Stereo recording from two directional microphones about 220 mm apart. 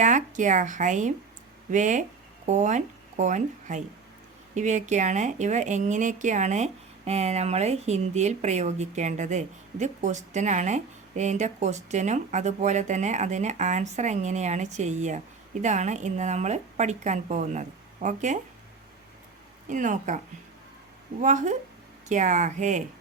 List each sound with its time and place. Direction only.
0.0 s a woman's voice: 35° right (ahead or behind)
19.7 s a woman's voice: 35° right (ahead or behind)